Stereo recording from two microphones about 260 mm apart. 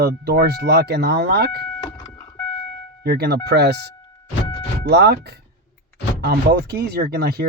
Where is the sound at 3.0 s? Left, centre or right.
Right.